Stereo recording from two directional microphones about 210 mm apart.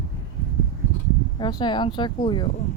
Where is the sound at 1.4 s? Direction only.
20° left (ahead or behind).